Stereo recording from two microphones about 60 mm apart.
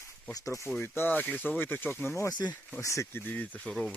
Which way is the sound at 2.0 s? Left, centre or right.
Left.